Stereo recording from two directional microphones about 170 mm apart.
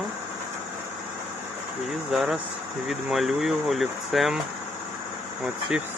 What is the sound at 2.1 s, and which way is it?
Speech, centre (ahead or behind).